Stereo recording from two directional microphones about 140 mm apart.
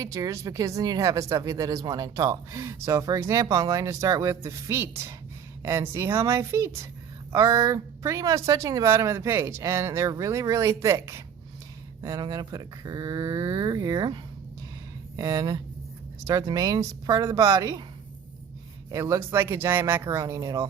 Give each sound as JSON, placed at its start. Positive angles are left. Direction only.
{"t": 0.0, "sound": "speech", "side_deg": -25}
{"t": 18.9, "sound": "speech", "side_deg": -20}